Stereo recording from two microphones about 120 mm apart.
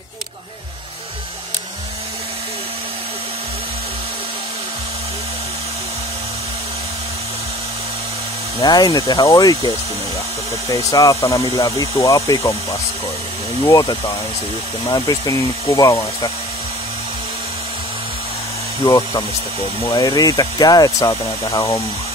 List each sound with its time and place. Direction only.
8.5 s speech: 35° left (ahead or behind)
10.7 s speech: 30° left (ahead or behind)
13.7 s speech: 30° left (ahead or behind)
18.9 s speech: 35° left (ahead or behind)